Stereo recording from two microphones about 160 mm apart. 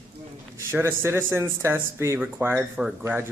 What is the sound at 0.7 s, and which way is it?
Speech, 15° right (ahead or behind).